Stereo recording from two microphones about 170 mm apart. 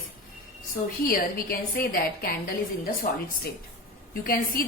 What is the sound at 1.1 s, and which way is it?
A woman's voice, 60° left (ahead or behind).